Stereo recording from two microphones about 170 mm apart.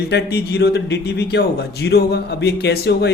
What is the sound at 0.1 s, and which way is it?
A man's voice, 80° left.